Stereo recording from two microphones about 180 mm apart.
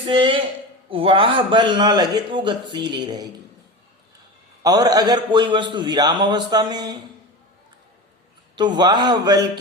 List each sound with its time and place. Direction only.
0.0 s a man's voice: 30° right (ahead or behind)
4.6 s a man's voice: 20° right (ahead or behind)
8.5 s a man's voice: 25° right (ahead or behind)